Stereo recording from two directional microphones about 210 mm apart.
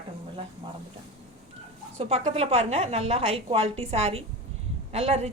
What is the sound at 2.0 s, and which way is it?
A woman's voice, 30° right (ahead or behind).